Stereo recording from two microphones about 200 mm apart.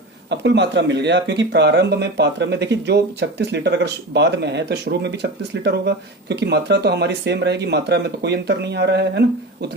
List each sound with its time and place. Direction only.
0.3 s speech: 60° right (ahead or behind)